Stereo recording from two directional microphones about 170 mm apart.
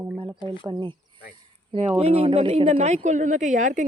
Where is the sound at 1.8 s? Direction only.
35° right (ahead or behind).